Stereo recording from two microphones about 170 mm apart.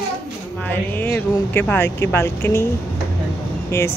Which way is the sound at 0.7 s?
10° left (ahead or behind).